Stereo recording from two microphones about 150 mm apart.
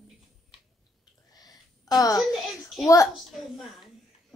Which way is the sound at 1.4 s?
25° left (ahead or behind).